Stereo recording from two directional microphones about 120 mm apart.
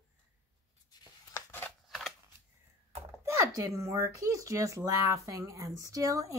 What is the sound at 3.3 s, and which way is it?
A woman's voice, 25° right (ahead or behind).